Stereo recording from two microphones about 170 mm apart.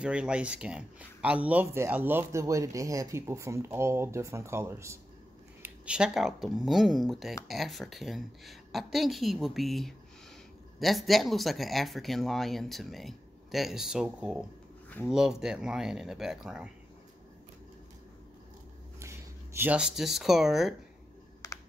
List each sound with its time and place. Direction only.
0.0 s speech: 5° right (ahead or behind)
5.6 s speech: 5° right (ahead or behind)
18.9 s speech: 15° right (ahead or behind)
21.4 s computer keyboard: 20° left (ahead or behind)